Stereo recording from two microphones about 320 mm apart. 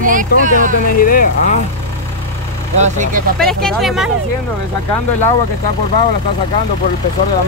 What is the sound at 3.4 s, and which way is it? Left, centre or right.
Speech, centre.